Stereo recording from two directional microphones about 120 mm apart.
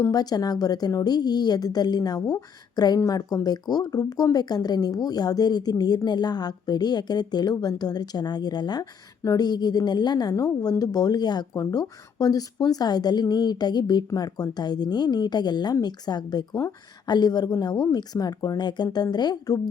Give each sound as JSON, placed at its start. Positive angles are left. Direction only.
{"t": 0.0, "sound": "speech", "side_deg": 30}